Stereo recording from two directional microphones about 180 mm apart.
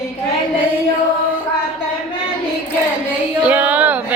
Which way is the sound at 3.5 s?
10° right (ahead or behind).